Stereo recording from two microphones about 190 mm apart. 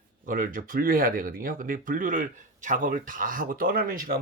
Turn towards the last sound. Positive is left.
turn(degrees=-50)  # may be behind; listen again after turning